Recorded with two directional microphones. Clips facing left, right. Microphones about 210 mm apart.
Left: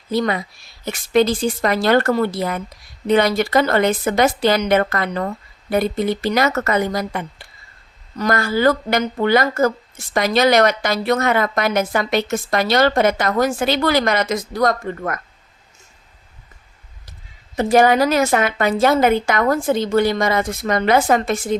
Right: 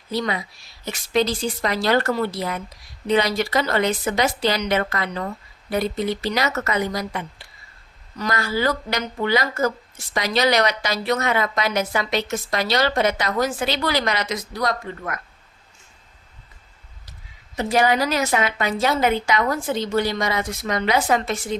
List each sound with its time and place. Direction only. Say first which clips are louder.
0.1 s a woman's voice: left 5 dB; 50° left (ahead or behind)
17.6 s a woman's voice: left 6 dB; 50° left (ahead or behind)